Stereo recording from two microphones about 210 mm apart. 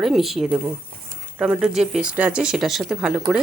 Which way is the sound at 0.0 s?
Centre (ahead or behind).